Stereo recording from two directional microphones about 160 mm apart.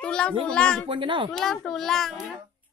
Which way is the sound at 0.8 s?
30° right (ahead or behind).